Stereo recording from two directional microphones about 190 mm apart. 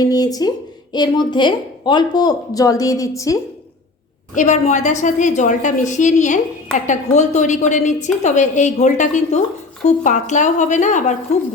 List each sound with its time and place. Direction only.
0.0 s a woman's voice: 20° left (ahead or behind)
4.4 s a woman's voice: 40° left (ahead or behind)